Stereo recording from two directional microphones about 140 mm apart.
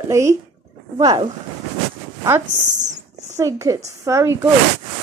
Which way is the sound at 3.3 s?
20° right (ahead or behind).